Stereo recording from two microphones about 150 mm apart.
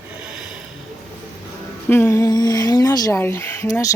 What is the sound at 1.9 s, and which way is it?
Speech, 15° left (ahead or behind).